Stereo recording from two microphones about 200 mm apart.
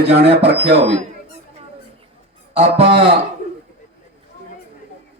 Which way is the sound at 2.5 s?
30° right (ahead or behind).